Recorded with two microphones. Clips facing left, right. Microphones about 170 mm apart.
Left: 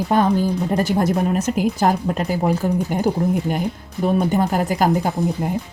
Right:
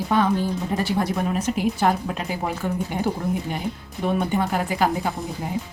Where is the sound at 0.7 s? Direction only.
45° left (ahead or behind).